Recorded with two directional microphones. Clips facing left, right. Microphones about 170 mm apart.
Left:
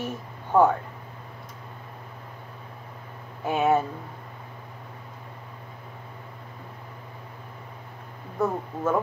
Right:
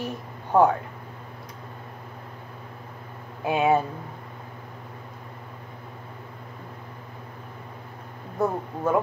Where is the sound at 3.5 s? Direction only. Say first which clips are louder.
Right 1 dB; centre (ahead or behind).